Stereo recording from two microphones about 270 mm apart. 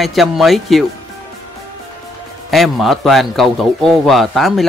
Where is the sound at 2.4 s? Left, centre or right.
Centre.